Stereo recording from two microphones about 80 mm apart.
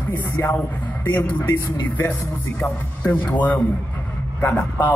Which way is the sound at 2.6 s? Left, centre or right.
Centre.